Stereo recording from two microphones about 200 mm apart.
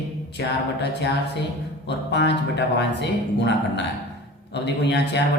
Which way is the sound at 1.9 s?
60° left (ahead or behind).